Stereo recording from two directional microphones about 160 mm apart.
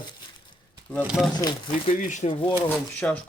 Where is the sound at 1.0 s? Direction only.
5° right (ahead or behind).